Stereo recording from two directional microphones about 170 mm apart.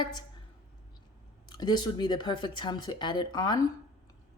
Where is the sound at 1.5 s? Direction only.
25° left (ahead or behind).